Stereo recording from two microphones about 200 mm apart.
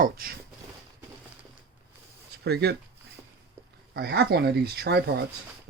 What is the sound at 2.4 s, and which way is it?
Speech, 55° right (ahead or behind).